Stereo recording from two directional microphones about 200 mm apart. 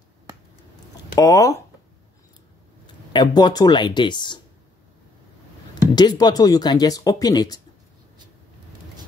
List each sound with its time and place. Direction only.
1.1 s speech: 15° left (ahead or behind)
3.1 s speech: 20° left (ahead or behind)
5.9 s speech: 20° left (ahead or behind)